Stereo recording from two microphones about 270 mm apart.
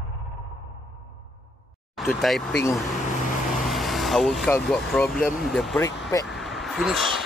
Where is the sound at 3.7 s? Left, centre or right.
Centre.